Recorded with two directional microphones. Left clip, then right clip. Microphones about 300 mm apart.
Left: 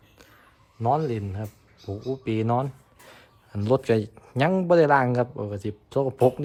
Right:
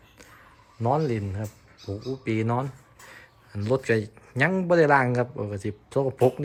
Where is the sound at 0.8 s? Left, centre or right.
Centre.